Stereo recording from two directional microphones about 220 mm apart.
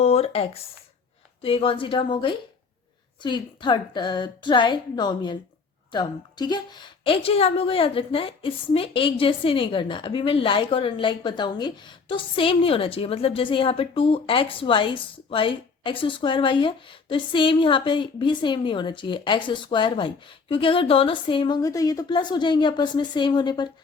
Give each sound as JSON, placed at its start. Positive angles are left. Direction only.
{"t": 0.0, "sound": "a woman's voice", "side_deg": 25}